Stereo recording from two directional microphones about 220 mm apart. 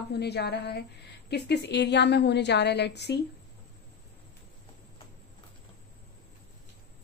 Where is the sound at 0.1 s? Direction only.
50° left (ahead or behind).